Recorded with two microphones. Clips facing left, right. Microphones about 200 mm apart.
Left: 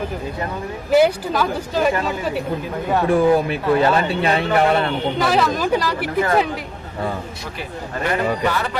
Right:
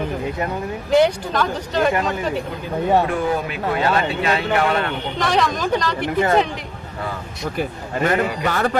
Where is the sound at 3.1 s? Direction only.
35° left (ahead or behind).